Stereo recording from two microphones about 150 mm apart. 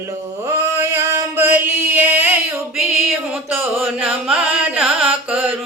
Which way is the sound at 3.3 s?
10° right (ahead or behind).